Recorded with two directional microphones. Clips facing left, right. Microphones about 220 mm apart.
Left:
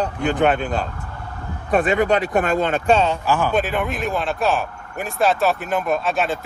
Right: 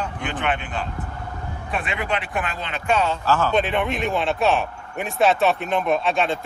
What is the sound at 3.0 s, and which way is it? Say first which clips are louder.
Speech: left 2 dB; 15° left (ahead or behind).